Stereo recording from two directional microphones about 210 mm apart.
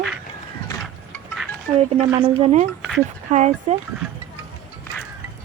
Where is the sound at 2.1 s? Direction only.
25° right (ahead or behind).